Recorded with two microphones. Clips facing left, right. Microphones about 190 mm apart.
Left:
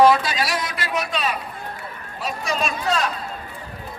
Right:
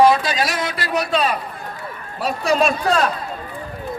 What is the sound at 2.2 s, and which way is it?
Speech, 60° right (ahead or behind).